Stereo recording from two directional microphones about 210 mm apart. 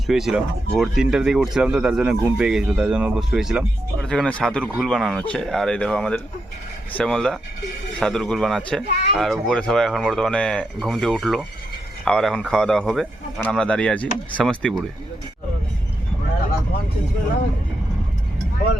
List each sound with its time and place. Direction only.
0.1 s speech: centre (ahead or behind)